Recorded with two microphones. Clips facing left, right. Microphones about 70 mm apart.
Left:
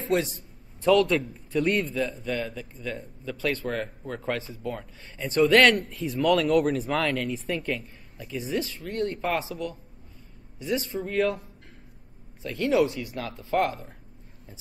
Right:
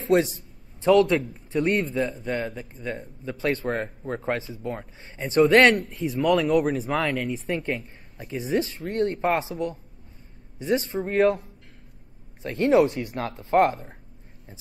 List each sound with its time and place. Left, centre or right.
0.0 s a man's voice: right
1.6 s speech: right
2.2 s speech: right
2.8 s speech: right
6.2 s speech: centre
7.4 s speech: right
7.8 s speech: right
12.4 s speech: right